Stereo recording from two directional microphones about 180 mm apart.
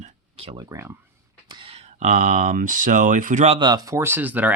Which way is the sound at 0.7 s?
15° right (ahead or behind).